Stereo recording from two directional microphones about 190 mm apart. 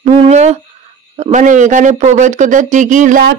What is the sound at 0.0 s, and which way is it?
Speech, 35° right (ahead or behind).